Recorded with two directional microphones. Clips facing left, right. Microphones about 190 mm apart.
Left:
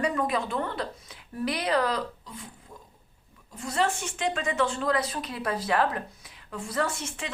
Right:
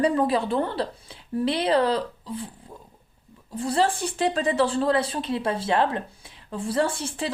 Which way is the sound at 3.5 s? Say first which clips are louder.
Right 5 dB; 30° right (ahead or behind).